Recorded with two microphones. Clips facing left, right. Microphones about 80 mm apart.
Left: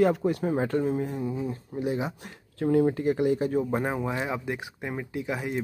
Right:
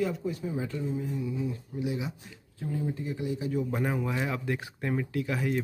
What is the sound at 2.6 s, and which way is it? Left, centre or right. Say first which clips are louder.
Speech: left 11 dB; left.